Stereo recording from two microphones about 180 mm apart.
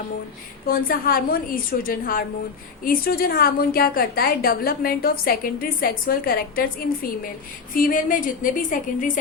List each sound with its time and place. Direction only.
0.7 s a woman's voice: 55° left (ahead or behind)